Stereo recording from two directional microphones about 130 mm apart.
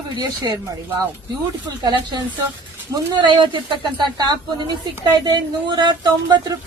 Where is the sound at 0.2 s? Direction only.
30° right (ahead or behind).